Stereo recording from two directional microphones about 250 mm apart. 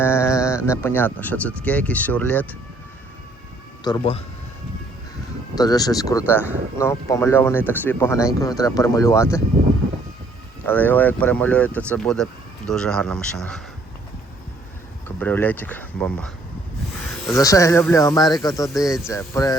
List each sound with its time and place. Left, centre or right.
0.0 s speech: centre
3.8 s speech: centre
5.5 s speech: centre
10.7 s speech: centre
15.0 s speech: centre
17.3 s speech: centre